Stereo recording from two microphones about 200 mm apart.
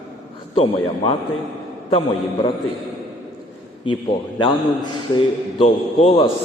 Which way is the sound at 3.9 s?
25° left (ahead or behind).